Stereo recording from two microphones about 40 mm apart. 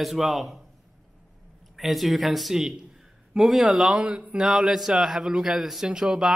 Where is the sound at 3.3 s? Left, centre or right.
Centre.